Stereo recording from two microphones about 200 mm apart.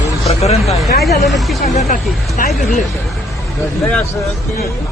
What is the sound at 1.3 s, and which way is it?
Speech, centre (ahead or behind).